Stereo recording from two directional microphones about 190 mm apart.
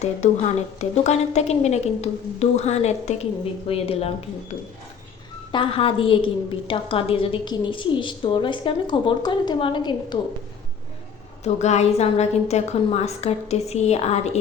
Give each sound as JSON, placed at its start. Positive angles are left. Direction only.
{"t": 0.0, "sound": "a woman's voice", "side_deg": 35}
{"t": 5.5, "sound": "a woman's voice", "side_deg": 25}
{"t": 11.4, "sound": "a woman's voice", "side_deg": 35}